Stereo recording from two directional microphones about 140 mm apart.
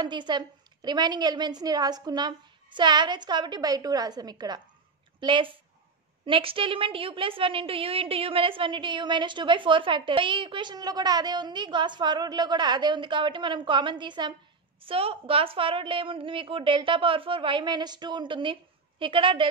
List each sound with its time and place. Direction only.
0.0 s a woman's voice: 30° right (ahead or behind)